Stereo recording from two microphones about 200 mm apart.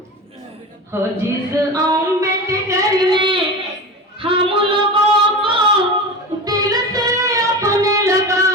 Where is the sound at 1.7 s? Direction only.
15° right (ahead or behind).